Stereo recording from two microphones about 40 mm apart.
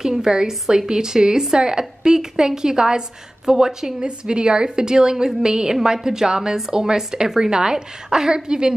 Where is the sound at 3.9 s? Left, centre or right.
Right.